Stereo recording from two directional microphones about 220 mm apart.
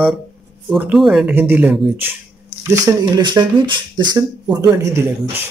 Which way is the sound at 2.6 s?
15° right (ahead or behind).